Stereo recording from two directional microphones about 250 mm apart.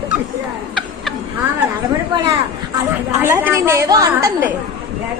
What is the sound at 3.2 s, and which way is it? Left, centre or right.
A woman's voice, centre.